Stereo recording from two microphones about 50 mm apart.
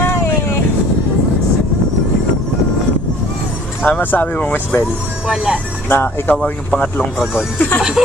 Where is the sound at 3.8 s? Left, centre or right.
Left.